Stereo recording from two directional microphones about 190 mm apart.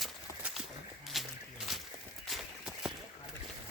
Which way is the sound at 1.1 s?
Centre (ahead or behind).